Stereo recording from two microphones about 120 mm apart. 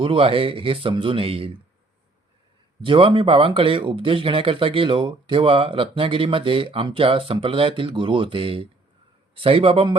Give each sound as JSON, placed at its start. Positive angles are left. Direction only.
{"t": 0.0, "sound": "speech", "side_deg": -45}
{"t": 2.8, "sound": "speech", "side_deg": -45}